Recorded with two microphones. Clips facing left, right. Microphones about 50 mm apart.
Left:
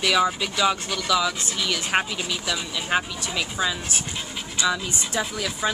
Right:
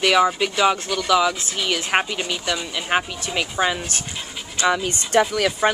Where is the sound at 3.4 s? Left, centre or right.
Right.